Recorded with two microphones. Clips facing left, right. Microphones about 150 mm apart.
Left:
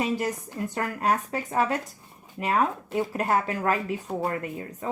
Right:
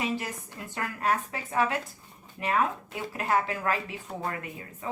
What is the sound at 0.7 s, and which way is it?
Speech, 40° left (ahead or behind).